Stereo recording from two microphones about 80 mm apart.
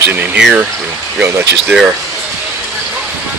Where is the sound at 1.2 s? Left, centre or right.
Right.